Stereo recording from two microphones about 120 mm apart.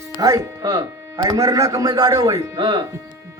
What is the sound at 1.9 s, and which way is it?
Speech, 40° right (ahead or behind).